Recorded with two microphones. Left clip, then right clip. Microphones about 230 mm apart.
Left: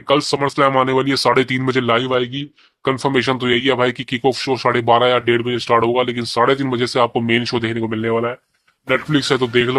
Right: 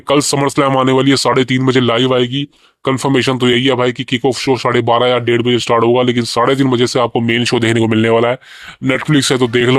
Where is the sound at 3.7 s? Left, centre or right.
Centre; by 8.3 s right.